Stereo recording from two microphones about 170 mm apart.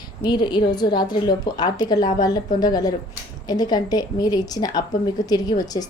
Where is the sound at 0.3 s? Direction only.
25° left (ahead or behind).